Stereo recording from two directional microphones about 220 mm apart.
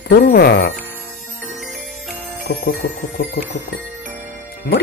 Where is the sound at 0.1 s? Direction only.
45° left (ahead or behind).